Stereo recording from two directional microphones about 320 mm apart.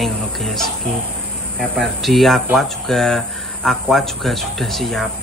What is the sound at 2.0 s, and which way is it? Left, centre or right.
Speech, centre.